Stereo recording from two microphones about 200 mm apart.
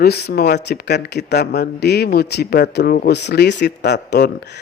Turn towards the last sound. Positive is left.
turn(degrees=55)  # may be behind; listen again after turning